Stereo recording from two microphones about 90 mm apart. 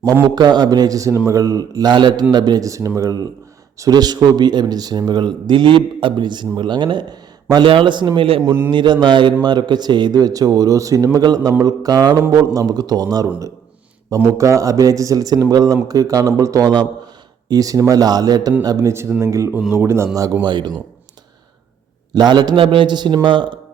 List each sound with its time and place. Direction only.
0.0 s a man's voice: 50° right (ahead or behind)
1.9 s a man's voice: 60° right (ahead or behind)
7.6 s a man's voice: 75° right (ahead or behind)
8.7 s a man's voice: 60° right (ahead or behind)
18.9 s a man's voice: 30° right (ahead or behind)
20.1 s a man's voice: 40° right (ahead or behind)
20.4 s speech: 55° right (ahead or behind)
22.1 s speech: 55° right (ahead or behind); by 22.9 s 85° right
22.9 s speech: 55° right (ahead or behind)